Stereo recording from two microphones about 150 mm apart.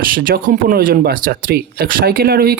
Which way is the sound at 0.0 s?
75° right (ahead or behind).